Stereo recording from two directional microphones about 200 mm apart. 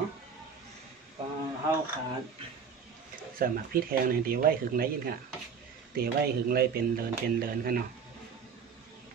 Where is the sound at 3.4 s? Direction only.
45° right (ahead or behind).